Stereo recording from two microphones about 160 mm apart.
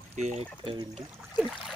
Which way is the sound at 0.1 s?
45° right (ahead or behind).